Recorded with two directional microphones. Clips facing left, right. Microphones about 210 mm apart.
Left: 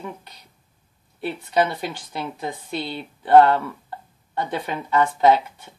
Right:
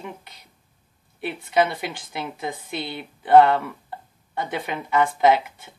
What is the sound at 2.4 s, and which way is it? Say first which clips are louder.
Speech: left 1 dB; 15° right (ahead or behind).